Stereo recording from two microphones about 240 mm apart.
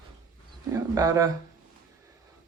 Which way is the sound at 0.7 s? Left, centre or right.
Centre.